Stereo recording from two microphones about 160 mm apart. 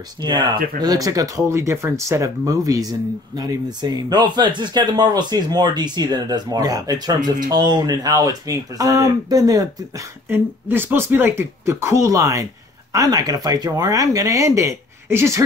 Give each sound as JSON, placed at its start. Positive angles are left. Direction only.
{"t": 0.2, "sound": "speech", "side_deg": -25}